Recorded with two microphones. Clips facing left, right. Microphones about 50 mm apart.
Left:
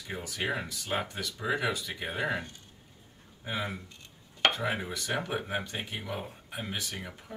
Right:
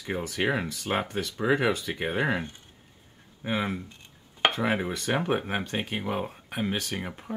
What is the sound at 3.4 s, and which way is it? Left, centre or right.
Speech, right.